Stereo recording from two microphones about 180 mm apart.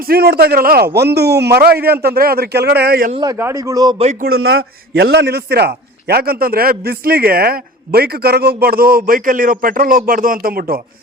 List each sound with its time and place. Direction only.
0.1 s a man's voice: 60° right (ahead or behind)
3.2 s a man's voice: 15° right (ahead or behind)
3.9 s speech: 35° right (ahead or behind)
4.2 s a man's voice: 60° right (ahead or behind)